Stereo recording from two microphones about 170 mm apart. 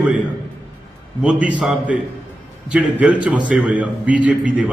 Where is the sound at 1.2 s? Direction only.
5° right (ahead or behind).